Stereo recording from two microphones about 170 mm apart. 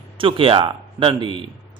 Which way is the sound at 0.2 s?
30° right (ahead or behind).